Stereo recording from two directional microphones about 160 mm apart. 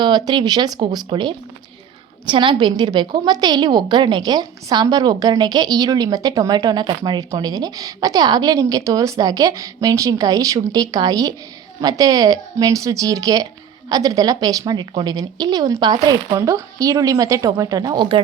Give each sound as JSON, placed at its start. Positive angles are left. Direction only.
{"t": 0.0, "sound": "a woman's voice", "side_deg": -25}